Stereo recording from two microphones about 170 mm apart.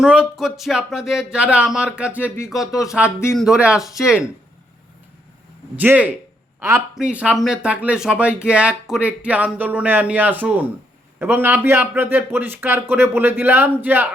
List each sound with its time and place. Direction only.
0.0 s speech: 5° right (ahead or behind)
3.3 s speech: 5° right (ahead or behind)
5.7 s speech: 10° right (ahead or behind)